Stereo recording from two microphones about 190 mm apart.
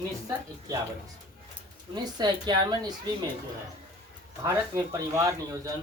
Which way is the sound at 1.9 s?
20° right (ahead or behind).